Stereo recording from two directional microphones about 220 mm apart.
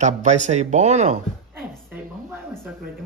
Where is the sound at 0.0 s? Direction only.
35° right (ahead or behind).